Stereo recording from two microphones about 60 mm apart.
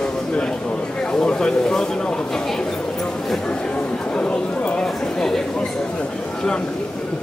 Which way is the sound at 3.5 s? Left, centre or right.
Centre.